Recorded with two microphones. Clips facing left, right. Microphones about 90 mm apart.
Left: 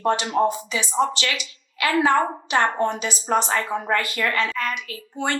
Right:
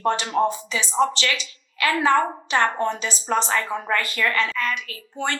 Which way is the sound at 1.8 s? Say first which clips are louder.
Even; 25° left (ahead or behind).